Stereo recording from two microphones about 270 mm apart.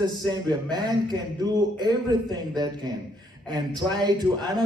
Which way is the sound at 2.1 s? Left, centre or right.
Centre.